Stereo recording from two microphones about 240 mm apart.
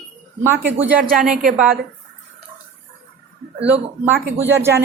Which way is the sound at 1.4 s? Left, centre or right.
Right.